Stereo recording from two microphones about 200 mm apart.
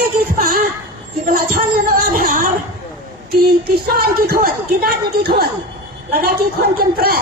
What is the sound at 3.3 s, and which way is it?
Speech, 50° right (ahead or behind).